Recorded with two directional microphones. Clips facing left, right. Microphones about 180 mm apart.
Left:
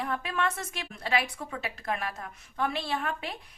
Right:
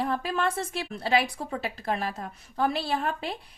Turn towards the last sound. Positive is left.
turn(degrees=-35)  # may be behind; listen again after turning